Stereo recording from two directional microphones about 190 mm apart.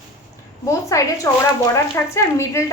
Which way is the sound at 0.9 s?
15° left (ahead or behind).